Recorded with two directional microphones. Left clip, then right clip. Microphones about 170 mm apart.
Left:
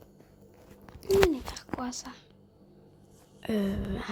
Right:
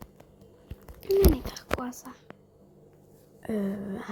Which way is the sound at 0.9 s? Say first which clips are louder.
Even; 5° left (ahead or behind).